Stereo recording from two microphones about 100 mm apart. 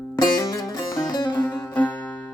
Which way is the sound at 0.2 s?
40° left (ahead or behind).